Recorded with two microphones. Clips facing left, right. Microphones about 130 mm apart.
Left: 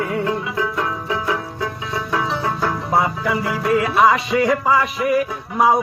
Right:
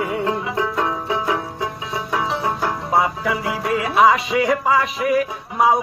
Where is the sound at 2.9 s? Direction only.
Centre (ahead or behind).